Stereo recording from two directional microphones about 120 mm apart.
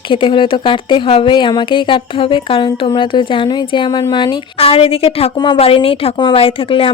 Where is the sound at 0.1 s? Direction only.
45° left (ahead or behind).